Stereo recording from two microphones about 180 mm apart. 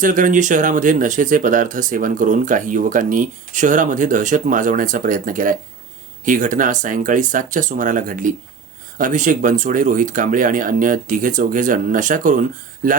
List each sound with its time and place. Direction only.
0.0 s speech: 45° right (ahead or behind)